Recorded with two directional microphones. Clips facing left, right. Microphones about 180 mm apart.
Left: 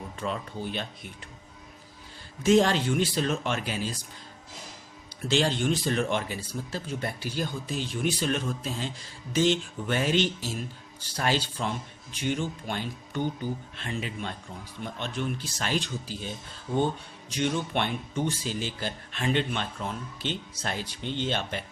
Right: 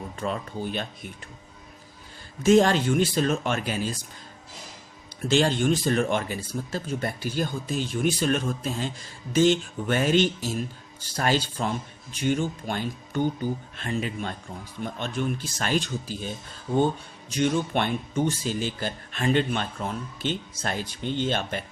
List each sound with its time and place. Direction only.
0.2 s speech: 45° right (ahead or behind)
2.4 s speech: 50° right (ahead or behind)
5.3 s speech: 50° right (ahead or behind)